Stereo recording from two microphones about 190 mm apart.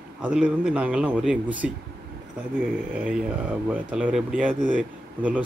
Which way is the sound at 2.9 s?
5° right (ahead or behind).